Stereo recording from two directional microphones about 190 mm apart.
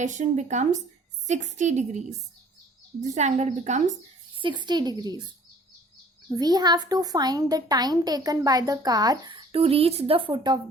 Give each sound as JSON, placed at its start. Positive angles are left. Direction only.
{"t": 0.0, "sound": "a woman's voice", "side_deg": -40}
{"t": 4.4, "sound": "a woman's voice", "side_deg": -25}
{"t": 6.3, "sound": "a woman's voice", "side_deg": -20}